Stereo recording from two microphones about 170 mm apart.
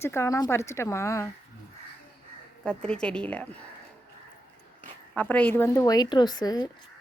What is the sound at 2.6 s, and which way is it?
Speech, 5° left (ahead or behind).